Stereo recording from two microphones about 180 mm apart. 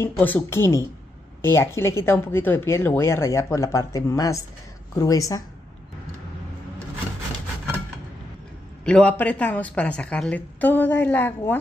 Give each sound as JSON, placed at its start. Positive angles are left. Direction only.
{"t": 0.0, "sound": "a woman's voice", "side_deg": 10}
{"t": 8.8, "sound": "speech", "side_deg": 5}